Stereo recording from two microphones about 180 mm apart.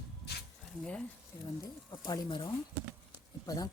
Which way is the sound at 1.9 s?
25° left (ahead or behind).